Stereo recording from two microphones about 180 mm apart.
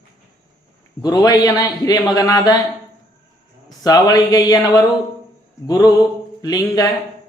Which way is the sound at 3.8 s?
20° left (ahead or behind).